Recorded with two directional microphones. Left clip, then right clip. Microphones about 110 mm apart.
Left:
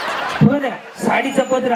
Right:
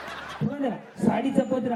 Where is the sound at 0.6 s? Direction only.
40° left (ahead or behind).